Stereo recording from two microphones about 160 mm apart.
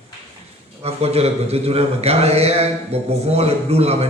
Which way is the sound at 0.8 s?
40° right (ahead or behind).